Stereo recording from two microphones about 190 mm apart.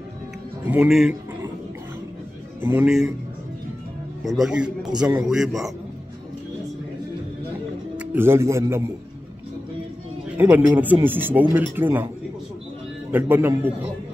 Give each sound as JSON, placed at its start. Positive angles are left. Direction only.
{"t": 0.7, "sound": "a man's voice", "side_deg": -5}
{"t": 2.6, "sound": "speech", "side_deg": -10}
{"t": 4.2, "sound": "a man's voice", "side_deg": 0}
{"t": 8.0, "sound": "speech", "side_deg": -10}
{"t": 10.3, "sound": "speech", "side_deg": -10}
{"t": 13.1, "sound": "speech", "side_deg": -10}